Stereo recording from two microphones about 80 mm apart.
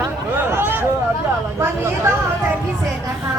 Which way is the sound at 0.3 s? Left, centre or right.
Right.